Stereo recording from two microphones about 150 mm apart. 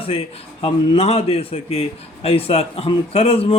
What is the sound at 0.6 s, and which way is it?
A man's voice, 40° left (ahead or behind).